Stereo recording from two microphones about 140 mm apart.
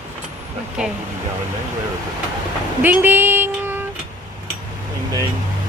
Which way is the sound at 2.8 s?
15° right (ahead or behind).